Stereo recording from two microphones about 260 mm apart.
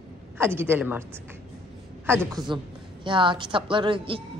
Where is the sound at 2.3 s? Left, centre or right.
Centre.